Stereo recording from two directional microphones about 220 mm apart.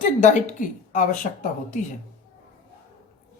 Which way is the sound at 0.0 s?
35° left (ahead or behind).